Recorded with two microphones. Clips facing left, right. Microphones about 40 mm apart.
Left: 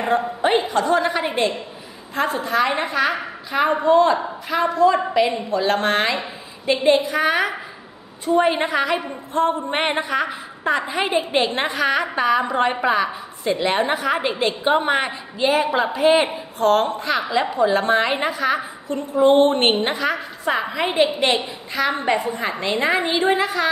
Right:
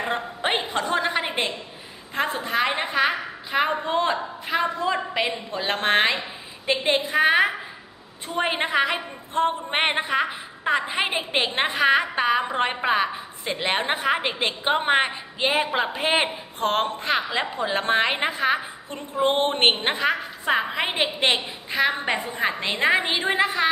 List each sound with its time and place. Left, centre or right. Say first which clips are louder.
0.1 s a woman's voice: left 10 dB; right